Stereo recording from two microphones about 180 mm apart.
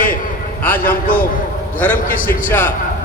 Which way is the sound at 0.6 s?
10° left (ahead or behind).